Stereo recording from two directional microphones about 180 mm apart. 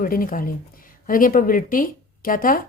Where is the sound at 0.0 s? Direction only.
50° left (ahead or behind).